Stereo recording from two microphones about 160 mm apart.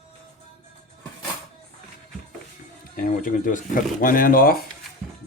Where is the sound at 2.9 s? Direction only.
55° left (ahead or behind).